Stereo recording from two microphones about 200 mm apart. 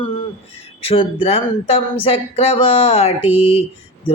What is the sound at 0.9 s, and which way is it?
Speech, 30° left (ahead or behind).